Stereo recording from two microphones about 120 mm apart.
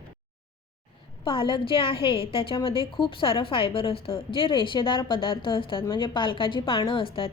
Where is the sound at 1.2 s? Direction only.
45° left (ahead or behind).